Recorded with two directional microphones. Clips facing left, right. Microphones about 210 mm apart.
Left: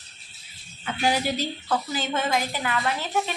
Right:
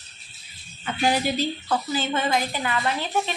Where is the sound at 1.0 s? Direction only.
10° left (ahead or behind).